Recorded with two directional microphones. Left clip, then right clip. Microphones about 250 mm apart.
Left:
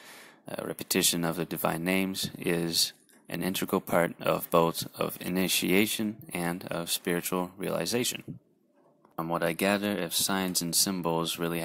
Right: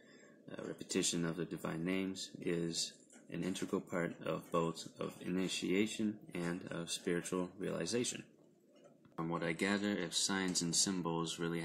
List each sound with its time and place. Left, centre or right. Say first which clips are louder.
0.5 s speech: left 10 dB; left
9.2 s speech: left 10 dB; left